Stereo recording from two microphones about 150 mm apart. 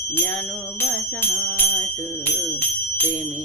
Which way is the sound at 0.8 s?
15° left (ahead or behind).